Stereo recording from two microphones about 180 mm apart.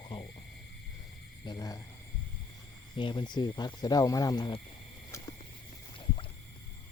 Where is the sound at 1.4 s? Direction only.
25° left (ahead or behind).